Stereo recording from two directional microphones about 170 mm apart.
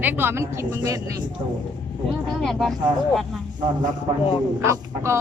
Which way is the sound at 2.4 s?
Centre (ahead or behind).